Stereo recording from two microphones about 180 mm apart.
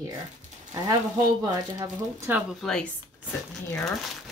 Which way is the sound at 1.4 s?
20° right (ahead or behind).